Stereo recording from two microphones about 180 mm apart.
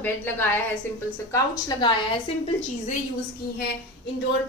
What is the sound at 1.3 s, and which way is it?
Speech, 25° left (ahead or behind).